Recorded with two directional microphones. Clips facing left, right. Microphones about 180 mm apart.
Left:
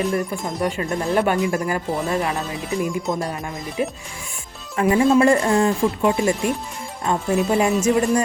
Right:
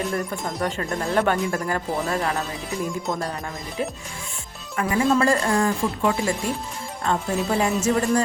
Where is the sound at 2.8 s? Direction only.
Centre (ahead or behind).